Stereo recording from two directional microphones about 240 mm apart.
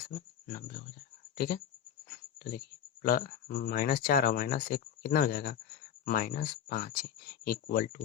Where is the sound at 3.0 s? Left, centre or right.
Left.